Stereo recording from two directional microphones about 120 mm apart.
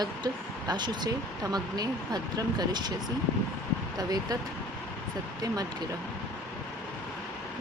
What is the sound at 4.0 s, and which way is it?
Speech, 30° right (ahead or behind).